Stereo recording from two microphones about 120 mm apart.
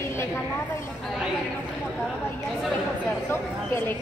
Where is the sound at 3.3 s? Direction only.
20° left (ahead or behind).